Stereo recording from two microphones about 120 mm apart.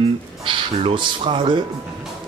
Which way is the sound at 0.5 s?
45° right (ahead or behind).